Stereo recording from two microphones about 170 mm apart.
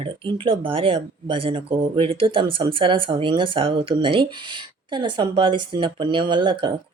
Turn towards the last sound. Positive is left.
turn(degrees=-25)  # may be behind; listen again after turning